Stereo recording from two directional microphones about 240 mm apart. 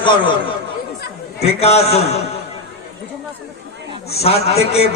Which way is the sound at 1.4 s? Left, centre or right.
Left.